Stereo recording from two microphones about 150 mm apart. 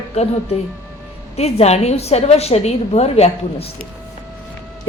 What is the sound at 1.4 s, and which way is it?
A woman's voice, 45° left (ahead or behind).